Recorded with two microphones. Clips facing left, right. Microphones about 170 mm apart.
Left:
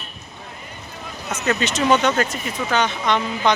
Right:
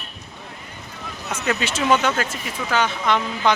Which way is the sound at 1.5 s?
5° right (ahead or behind).